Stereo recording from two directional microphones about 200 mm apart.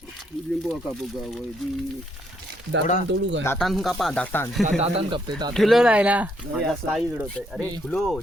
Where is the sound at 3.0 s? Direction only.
60° right (ahead or behind).